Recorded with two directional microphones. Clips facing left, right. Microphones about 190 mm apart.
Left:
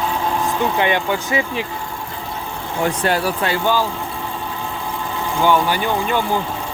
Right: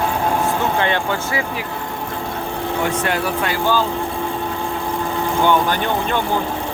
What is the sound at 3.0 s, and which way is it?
Speech, 35° left (ahead or behind).